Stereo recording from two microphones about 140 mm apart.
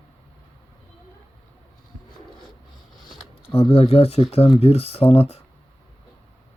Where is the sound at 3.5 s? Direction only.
45° left (ahead or behind).